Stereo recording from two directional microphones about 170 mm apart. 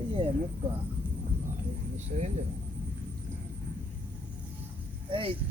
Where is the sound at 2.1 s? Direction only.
50° right (ahead or behind).